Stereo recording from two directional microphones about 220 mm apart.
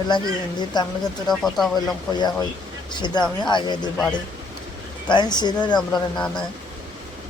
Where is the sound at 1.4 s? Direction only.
Centre (ahead or behind).